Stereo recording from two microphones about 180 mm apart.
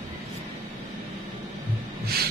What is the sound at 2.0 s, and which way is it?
Heart sounds, 60° right (ahead or behind).